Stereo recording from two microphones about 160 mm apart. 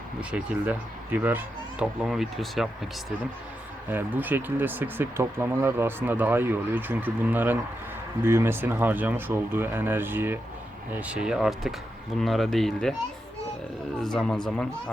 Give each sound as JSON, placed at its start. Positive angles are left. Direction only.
{"t": 0.2, "sound": "speech", "side_deg": -10}
{"t": 3.8, "sound": "speech", "side_deg": -10}
{"t": 14.0, "sound": "speech", "side_deg": 5}